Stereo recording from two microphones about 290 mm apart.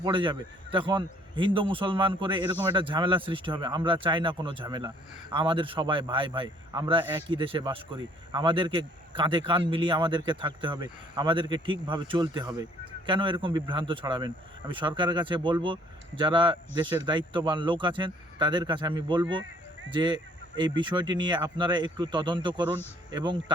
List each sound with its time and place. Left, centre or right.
0.0 s a man's voice: centre